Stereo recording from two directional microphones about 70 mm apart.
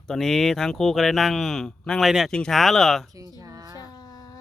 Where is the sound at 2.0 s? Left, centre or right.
Centre.